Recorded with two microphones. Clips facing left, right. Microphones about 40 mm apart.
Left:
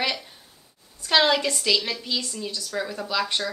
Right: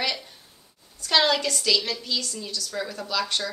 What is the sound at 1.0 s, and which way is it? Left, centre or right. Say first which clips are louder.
A woman's voice: left 2 dB; centre.